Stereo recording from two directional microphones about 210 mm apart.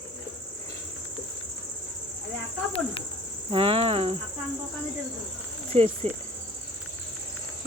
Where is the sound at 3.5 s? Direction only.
25° right (ahead or behind).